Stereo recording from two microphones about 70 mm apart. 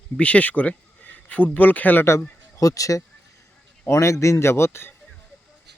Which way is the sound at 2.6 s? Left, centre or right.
Left.